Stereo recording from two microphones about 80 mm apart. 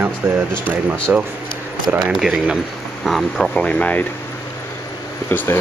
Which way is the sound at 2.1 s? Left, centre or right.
Centre.